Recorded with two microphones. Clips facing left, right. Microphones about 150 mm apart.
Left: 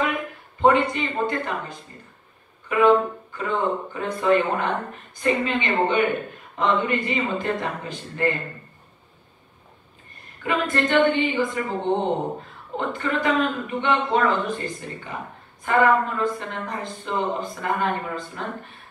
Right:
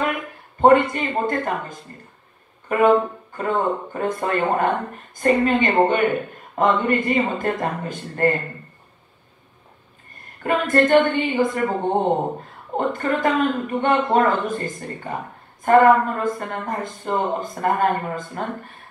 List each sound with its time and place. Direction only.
0.6 s speech: 45° right (ahead or behind)
10.4 s speech: 45° right (ahead or behind)
12.7 s speech: 45° right (ahead or behind)